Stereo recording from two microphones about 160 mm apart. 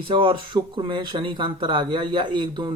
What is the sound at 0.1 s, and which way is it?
Speech, 35° right (ahead or behind).